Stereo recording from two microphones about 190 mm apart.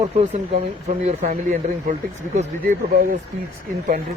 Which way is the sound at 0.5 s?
40° right (ahead or behind).